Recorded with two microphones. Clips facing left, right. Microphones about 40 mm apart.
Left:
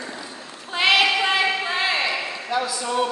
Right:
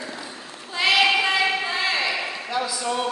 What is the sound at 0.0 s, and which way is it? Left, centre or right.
Children playing, centre.